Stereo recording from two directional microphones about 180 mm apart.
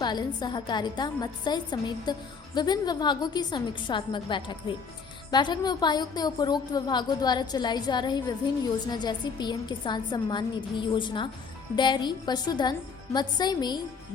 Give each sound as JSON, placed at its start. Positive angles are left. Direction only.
{"t": 0.0, "sound": "a woman's voice", "side_deg": 25}